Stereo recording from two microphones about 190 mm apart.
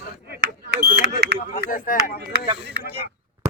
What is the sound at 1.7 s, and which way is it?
Speech, 45° left (ahead or behind).